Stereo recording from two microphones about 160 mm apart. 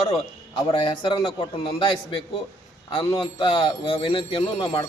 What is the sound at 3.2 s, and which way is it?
Speech, 30° left (ahead or behind).